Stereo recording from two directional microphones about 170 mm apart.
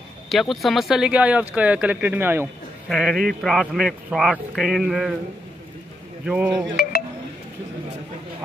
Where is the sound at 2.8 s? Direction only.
Centre (ahead or behind).